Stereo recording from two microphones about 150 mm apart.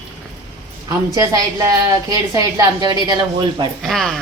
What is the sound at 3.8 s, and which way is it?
Speech, centre (ahead or behind).